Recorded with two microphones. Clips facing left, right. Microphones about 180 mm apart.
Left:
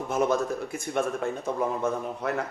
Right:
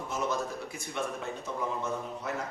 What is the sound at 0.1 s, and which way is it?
A man's voice, 55° left (ahead or behind).